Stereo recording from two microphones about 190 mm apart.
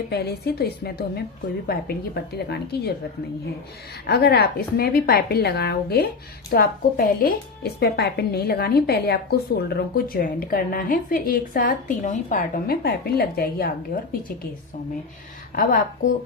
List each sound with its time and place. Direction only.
0.1 s a woman's voice: 55° left (ahead or behind)
4.0 s a woman's voice: 60° left (ahead or behind)